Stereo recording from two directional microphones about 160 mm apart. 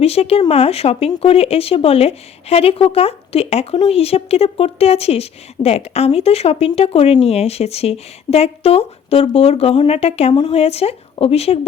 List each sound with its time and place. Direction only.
0.0 s a woman's voice: 40° left (ahead or behind)